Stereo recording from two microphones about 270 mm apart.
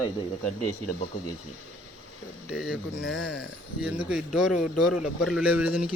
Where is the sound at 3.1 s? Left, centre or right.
Left.